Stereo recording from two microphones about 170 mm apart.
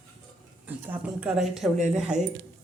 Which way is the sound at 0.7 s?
10° right (ahead or behind).